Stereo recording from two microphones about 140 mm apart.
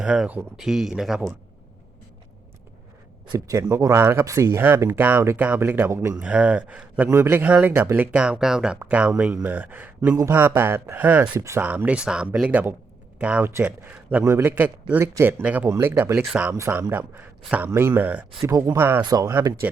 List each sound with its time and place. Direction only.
0.0 s speech: 5° right (ahead or behind)
3.3 s speech: 20° right (ahead or behind)
16.6 s speech: 20° right (ahead or behind)
18.4 s speech: 20° right (ahead or behind)
19.0 s speech: 25° right (ahead or behind)